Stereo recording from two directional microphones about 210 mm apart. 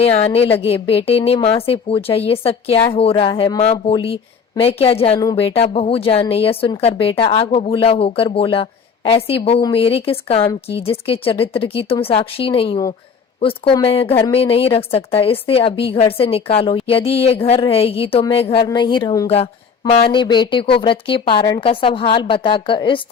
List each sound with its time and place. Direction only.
0.0 s speech: 30° left (ahead or behind)
19.3 s speech: 30° left (ahead or behind)